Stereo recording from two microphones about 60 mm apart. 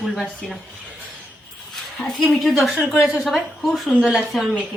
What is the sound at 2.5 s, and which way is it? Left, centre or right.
A woman's voice, centre.